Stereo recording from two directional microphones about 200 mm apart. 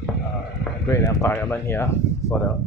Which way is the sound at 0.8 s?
15° left (ahead or behind).